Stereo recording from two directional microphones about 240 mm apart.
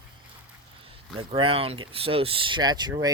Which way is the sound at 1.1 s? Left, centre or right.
Right.